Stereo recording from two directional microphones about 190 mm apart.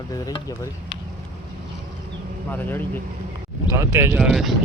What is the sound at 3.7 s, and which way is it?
Speech, 15° right (ahead or behind).